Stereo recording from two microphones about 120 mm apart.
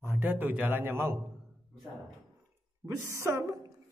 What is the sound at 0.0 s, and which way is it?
A man's voice, 20° right (ahead or behind).